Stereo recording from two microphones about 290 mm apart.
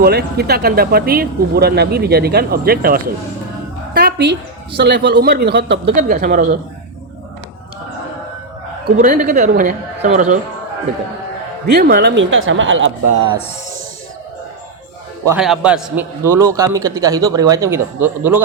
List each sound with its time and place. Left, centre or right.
0.0 s speech: right
3.9 s music: right
4.8 s speech: right
9.0 s speech: right
11.6 s speech: right
15.3 s a man's voice: centre